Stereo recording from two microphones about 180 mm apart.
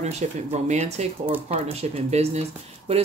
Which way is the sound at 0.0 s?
40° right (ahead or behind).